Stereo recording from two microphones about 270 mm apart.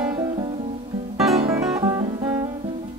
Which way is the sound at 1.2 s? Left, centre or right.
Centre.